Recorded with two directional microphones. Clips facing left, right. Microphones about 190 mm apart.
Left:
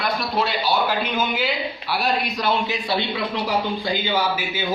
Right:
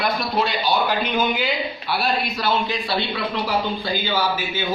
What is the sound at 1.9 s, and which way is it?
A man's voice, 15° left (ahead or behind).